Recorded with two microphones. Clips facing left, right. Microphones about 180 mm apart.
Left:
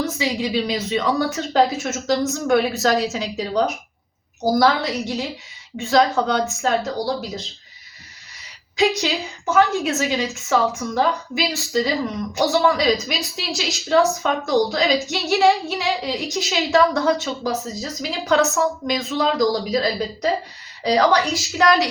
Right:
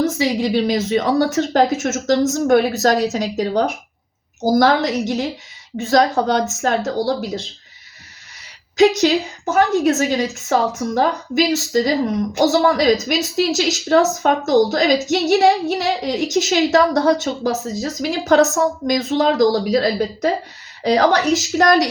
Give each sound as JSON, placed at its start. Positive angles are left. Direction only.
{"t": 0.0, "sound": "a woman's voice", "side_deg": -45}
{"t": 8.8, "sound": "a woman's voice", "side_deg": -45}